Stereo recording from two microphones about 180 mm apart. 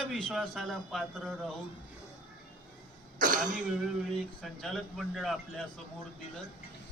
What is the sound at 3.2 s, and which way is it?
Speech, 50° right (ahead or behind).